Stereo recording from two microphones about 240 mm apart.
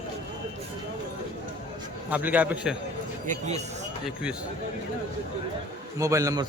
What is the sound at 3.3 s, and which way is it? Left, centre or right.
Speech, right.